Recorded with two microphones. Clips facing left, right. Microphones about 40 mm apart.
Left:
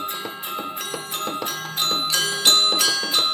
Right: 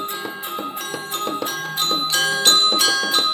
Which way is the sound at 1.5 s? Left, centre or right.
Right.